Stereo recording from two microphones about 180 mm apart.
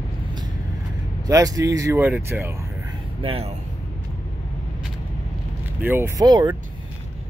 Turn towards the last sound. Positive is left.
turn(degrees=-25)  # may be behind; listen again after turning